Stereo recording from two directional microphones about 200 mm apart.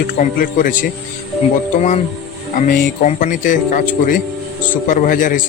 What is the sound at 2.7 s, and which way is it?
Speech, 40° left (ahead or behind).